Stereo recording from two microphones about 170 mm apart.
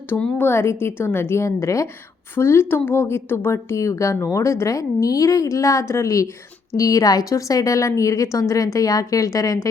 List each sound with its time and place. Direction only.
0.1 s a woman's voice: 10° left (ahead or behind)